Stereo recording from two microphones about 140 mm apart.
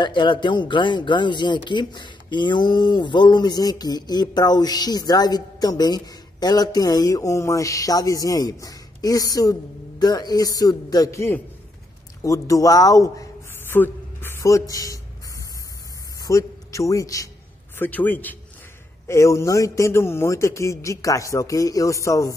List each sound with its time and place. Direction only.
0.0 s speech: 35° left (ahead or behind)
13.7 s a sound: 15° left (ahead or behind)
16.2 s a man's voice: 20° left (ahead or behind)
17.7 s a man's voice: 10° left (ahead or behind)